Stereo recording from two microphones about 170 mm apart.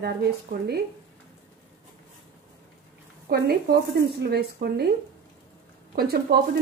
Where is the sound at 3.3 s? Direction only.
70° right (ahead or behind).